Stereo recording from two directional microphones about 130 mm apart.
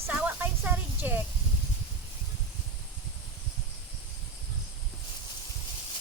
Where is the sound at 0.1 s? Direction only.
10° right (ahead or behind).